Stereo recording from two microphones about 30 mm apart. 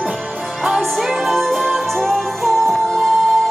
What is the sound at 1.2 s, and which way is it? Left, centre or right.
Music, centre.